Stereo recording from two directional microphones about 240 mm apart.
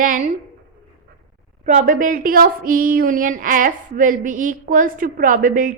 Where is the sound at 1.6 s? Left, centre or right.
Right.